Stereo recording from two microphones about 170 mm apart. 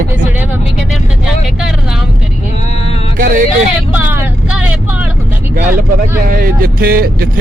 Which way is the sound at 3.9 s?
10° right (ahead or behind).